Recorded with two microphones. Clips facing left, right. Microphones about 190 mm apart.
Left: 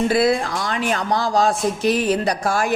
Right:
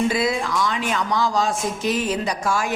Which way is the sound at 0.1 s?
60° left (ahead or behind).